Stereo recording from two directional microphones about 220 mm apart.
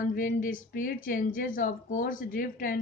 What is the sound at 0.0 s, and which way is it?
Speech, 40° left (ahead or behind).